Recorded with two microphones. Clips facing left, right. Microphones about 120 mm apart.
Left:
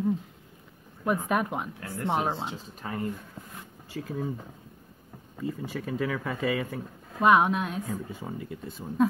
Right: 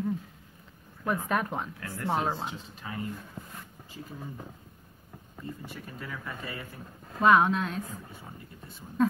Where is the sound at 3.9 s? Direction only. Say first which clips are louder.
Left 8 dB; 90° left.